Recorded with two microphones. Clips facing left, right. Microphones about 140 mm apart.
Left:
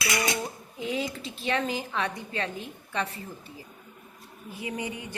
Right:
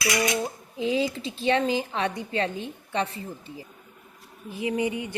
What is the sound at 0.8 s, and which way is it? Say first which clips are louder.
A woman's voice: right 6 dB; 30° right (ahead or behind).